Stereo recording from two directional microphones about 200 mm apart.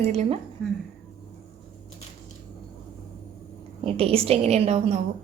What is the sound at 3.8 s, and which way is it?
A woman's voice, 30° right (ahead or behind).